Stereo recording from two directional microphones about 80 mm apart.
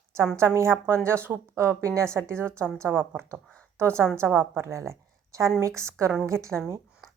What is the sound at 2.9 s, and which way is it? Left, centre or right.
Speech, right.